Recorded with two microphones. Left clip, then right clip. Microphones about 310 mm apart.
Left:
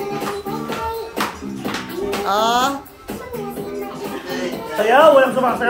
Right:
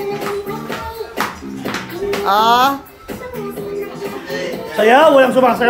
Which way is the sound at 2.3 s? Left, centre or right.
Centre.